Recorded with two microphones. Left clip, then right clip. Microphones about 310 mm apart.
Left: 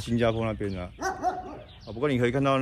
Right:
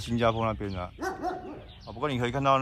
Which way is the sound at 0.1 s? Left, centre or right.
Right.